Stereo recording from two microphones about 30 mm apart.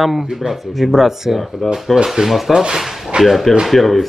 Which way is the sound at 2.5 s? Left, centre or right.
Right.